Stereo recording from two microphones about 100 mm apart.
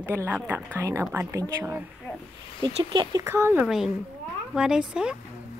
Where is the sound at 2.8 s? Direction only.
55° right (ahead or behind).